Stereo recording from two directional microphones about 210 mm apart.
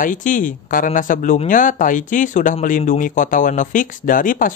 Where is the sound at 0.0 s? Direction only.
40° left (ahead or behind).